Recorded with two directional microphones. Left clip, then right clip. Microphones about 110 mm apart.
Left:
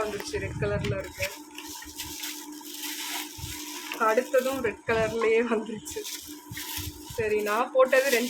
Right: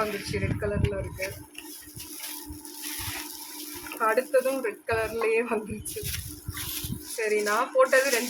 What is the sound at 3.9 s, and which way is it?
Speech, 15° left (ahead or behind).